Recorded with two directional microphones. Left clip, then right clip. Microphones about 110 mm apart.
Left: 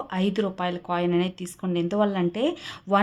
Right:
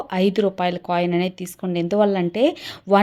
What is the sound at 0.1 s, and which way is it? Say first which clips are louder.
Speech: right 8 dB; 40° right (ahead or behind).